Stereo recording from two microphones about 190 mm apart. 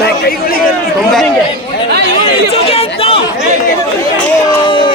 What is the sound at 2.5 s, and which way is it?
Chatter, 30° left (ahead or behind).